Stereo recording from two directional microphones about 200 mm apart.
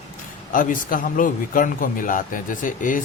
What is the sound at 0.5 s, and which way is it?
A man's voice, 40° left (ahead or behind).